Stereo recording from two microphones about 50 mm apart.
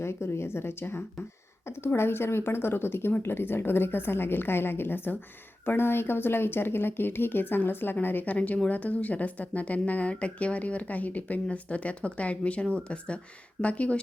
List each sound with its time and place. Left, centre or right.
0.0 s a woman's voice: left